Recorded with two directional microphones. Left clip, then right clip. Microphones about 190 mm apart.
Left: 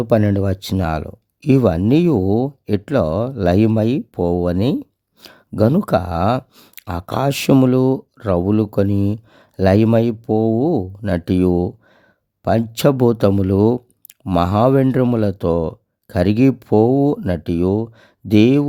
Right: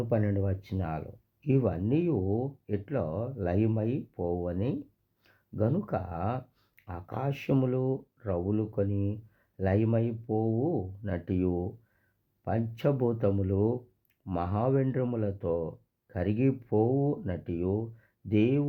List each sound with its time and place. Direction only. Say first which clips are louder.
0.0 s speech: left 14 dB; 60° left (ahead or behind)
12.5 s speech: left 14 dB; 60° left (ahead or behind)
14.3 s speech: left 15 dB; 60° left (ahead or behind)